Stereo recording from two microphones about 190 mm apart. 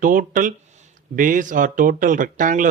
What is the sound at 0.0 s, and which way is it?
Speech, 45° right (ahead or behind).